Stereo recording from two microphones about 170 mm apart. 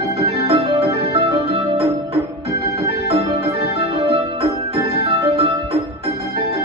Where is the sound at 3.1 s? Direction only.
40° right (ahead or behind).